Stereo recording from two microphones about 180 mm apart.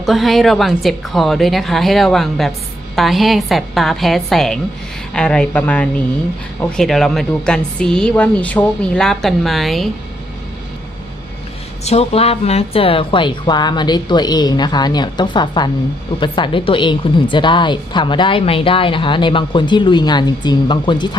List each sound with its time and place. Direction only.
0.0 s a woman's voice: centre (ahead or behind)
11.9 s a woman's voice: 35° left (ahead or behind)